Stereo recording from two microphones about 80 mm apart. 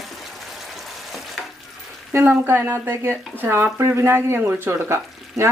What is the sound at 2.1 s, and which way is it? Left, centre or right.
A woman's voice, right.